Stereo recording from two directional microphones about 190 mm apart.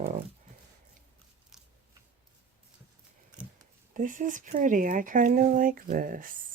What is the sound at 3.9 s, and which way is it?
Speech, 45° right (ahead or behind).